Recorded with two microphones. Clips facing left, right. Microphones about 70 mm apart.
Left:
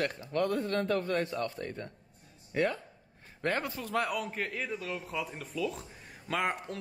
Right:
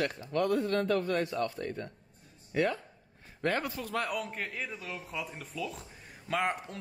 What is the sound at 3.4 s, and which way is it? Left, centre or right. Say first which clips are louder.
Speech: right 1 dB; left.